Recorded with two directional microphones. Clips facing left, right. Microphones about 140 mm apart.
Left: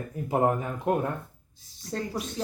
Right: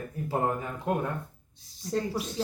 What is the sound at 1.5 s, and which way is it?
Speech, centre (ahead or behind).